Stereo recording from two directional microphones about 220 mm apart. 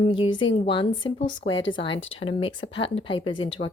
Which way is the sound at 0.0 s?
25° left (ahead or behind).